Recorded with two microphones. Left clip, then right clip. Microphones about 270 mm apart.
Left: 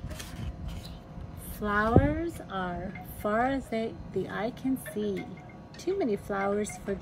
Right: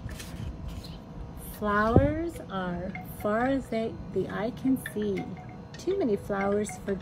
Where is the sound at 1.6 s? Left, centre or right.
Centre.